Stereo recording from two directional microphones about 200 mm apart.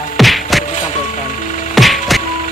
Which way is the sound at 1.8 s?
Centre (ahead or behind).